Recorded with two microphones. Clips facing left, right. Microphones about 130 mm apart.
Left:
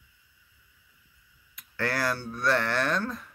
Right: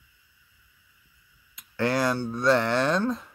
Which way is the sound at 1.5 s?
20° right (ahead or behind).